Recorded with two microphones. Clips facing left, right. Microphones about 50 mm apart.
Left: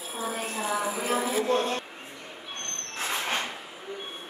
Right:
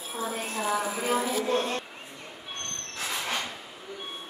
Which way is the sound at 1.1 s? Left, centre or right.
Centre.